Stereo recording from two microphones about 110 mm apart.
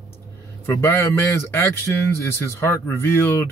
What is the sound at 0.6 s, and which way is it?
Speech, 20° left (ahead or behind).